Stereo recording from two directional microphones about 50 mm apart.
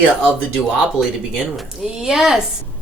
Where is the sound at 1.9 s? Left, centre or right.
Centre.